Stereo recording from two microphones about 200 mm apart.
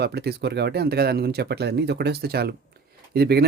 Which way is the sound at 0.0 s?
55° right (ahead or behind).